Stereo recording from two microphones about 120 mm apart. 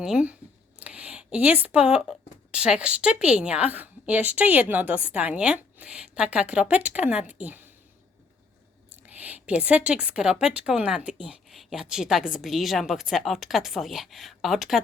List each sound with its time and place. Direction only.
0.0 s a woman's voice: 5° right (ahead or behind)
9.0 s a woman's voice: 15° right (ahead or behind)